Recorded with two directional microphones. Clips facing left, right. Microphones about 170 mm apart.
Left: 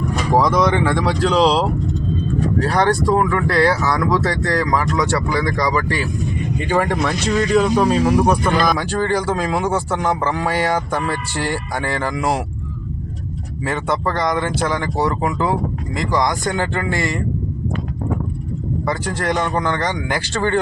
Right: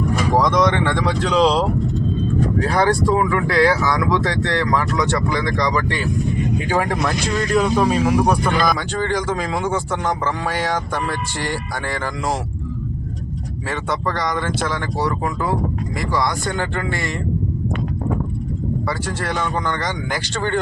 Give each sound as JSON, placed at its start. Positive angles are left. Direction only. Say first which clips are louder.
{"t": 0.3, "sound": "speech", "louder": "left 2 dB", "side_deg": 5}
{"t": 2.6, "sound": "speech", "louder": "left 1 dB", "side_deg": 0}
{"t": 13.7, "sound": "speech", "louder": "left 3 dB", "side_deg": 15}
{"t": 18.9, "sound": "speech", "louder": "left 3 dB", "side_deg": 15}